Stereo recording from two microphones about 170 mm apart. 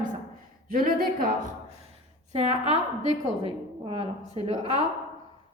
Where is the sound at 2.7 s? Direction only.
25° left (ahead or behind).